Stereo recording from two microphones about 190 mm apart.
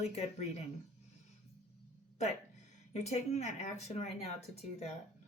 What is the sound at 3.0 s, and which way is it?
Speech, 35° left (ahead or behind).